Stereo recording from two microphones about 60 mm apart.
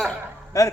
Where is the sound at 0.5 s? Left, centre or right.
Left.